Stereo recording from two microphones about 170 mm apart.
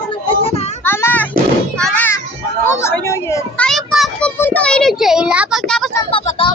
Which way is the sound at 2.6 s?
15° left (ahead or behind).